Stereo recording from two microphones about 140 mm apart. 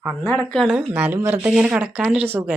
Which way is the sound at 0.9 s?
15° right (ahead or behind).